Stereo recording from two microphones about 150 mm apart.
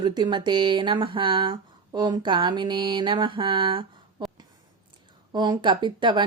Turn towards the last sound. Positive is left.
turn(degrees=-30)  # may be behind; listen again after turning